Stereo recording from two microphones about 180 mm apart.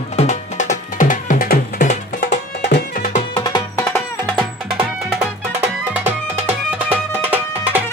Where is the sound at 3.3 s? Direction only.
25° left (ahead or behind).